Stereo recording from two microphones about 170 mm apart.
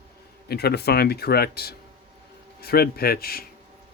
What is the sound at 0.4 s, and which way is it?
Speech, 70° left (ahead or behind).